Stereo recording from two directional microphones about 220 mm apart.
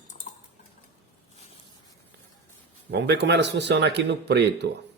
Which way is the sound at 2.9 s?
50° right (ahead or behind).